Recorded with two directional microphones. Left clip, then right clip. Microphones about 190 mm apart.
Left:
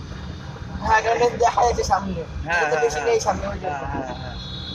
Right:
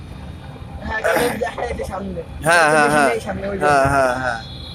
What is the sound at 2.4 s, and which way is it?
Speech, 45° right (ahead or behind).